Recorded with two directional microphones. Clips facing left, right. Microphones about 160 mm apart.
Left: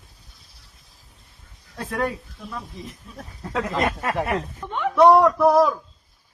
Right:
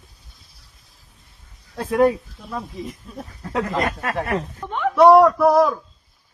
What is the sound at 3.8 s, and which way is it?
Speech, 20° left (ahead or behind).